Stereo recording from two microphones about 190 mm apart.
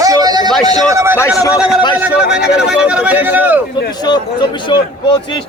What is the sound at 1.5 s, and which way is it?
Speech, 5° right (ahead or behind).